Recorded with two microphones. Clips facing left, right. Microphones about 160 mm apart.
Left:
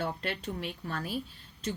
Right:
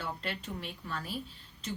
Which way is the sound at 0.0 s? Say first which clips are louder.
Left 4 dB; 45° left (ahead or behind).